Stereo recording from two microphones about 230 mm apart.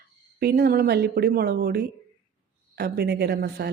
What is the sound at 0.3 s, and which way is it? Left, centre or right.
Speech, right.